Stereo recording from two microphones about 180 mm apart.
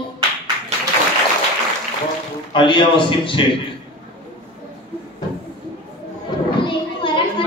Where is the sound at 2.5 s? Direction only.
25° left (ahead or behind).